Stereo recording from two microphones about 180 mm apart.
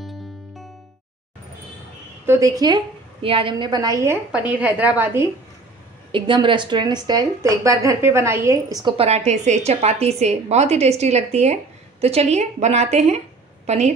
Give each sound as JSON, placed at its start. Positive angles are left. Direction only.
{"t": 2.2, "sound": "a woman's voice", "side_deg": -15}
{"t": 6.1, "sound": "a woman's voice", "side_deg": -25}
{"t": 8.9, "sound": "a woman's voice", "side_deg": -35}